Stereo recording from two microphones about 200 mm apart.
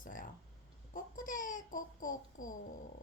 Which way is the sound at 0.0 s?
40° left (ahead or behind).